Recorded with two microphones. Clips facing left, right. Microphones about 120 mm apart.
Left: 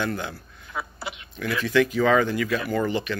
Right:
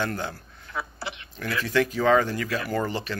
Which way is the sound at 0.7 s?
20° left (ahead or behind).